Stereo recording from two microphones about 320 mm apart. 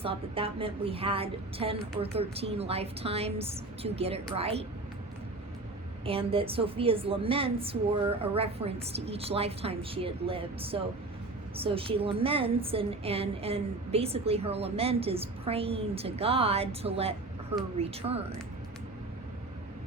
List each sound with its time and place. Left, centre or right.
0.0 s a woman's voice: centre
6.1 s a woman's voice: centre